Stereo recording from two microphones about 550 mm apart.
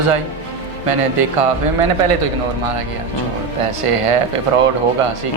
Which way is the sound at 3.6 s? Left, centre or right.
Right.